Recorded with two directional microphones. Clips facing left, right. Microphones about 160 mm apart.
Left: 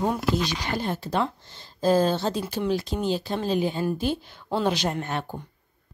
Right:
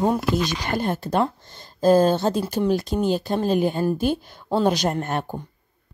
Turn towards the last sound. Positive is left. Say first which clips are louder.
# right 4 dB
turn(degrees=-50)  # may be behind; listen again after turning